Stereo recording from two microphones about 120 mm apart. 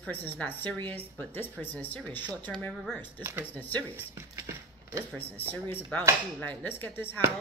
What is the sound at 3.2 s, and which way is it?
Speech, 20° right (ahead or behind).